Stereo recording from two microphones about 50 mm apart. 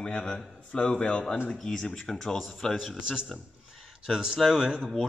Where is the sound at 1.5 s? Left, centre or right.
Centre.